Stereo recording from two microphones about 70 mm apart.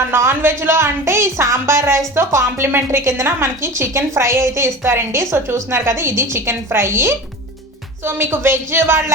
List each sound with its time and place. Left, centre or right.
0.0 s speech: right